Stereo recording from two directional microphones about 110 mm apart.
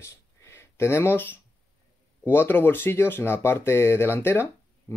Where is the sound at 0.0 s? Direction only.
25° left (ahead or behind).